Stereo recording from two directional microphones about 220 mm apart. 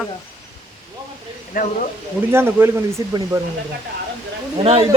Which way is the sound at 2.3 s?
10° right (ahead or behind).